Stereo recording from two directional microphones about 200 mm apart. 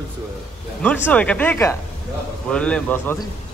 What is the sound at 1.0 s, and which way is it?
Speech, 5° left (ahead or behind).